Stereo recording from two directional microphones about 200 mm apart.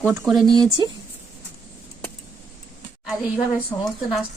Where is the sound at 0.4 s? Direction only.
20° right (ahead or behind).